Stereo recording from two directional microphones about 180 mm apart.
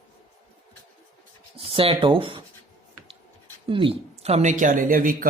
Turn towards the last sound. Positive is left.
turn(degrees=-50)  # may be behind; listen again after turning